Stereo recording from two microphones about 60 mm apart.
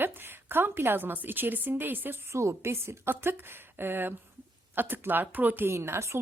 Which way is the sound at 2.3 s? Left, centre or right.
Right.